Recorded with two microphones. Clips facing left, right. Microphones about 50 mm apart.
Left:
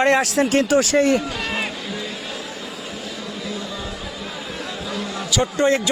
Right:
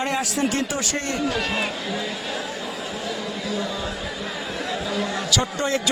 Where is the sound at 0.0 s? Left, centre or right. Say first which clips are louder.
Left 7 dB; left.